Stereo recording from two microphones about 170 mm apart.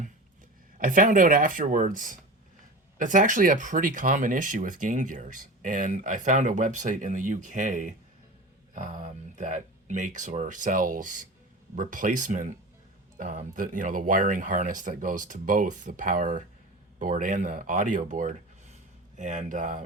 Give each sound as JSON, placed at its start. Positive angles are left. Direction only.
{"t": 0.8, "sound": "speech", "side_deg": -50}